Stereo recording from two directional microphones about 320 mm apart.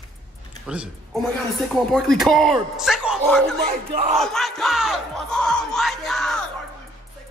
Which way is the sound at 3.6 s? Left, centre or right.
Right.